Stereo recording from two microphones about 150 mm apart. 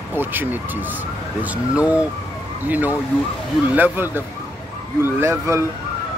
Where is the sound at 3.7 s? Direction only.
10° right (ahead or behind).